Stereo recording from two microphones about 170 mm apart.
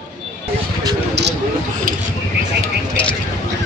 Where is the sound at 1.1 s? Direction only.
85° right.